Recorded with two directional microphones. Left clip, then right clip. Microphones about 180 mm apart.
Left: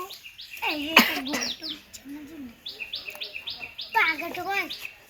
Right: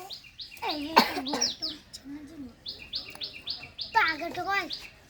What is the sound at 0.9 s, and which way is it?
Speech, 20° right (ahead or behind).